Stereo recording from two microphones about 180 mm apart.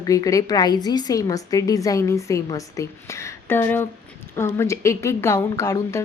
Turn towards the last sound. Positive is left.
turn(degrees=20)  # may be behind; listen again after turning